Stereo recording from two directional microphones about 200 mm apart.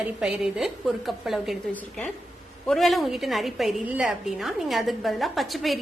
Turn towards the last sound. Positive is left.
turn(degrees=0)  # may be behind; listen again after turning